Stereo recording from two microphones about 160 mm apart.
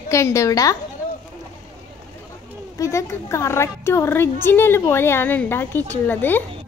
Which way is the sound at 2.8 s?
20° left (ahead or behind).